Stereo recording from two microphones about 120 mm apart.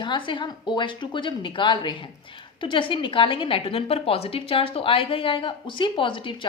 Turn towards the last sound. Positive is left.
turn(degrees=45)  # may be behind; listen again after turning